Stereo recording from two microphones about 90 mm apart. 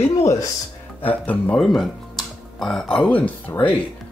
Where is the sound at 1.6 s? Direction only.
5° left (ahead or behind).